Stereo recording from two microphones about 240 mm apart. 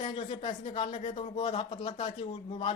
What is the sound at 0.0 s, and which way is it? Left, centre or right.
Speech, left.